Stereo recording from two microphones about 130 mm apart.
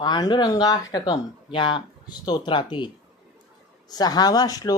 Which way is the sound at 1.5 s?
40° left (ahead or behind).